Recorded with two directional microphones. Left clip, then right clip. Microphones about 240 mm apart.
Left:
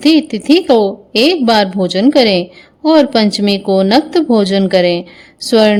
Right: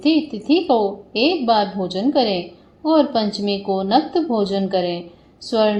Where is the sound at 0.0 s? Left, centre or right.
Left.